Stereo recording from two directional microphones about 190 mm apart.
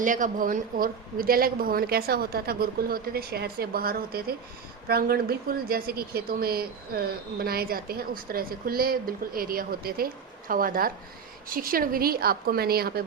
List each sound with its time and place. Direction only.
0.0 s speech: 45° right (ahead or behind)